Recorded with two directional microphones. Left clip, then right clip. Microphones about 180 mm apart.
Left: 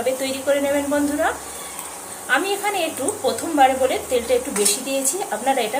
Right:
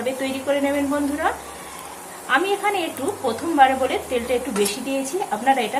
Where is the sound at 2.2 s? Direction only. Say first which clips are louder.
Right 1 dB; centre (ahead or behind).